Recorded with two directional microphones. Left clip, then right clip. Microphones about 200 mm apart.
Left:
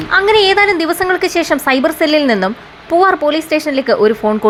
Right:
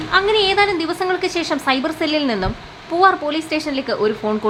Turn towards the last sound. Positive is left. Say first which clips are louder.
# left 8 dB
turn(degrees=15)  # may be behind; listen again after turning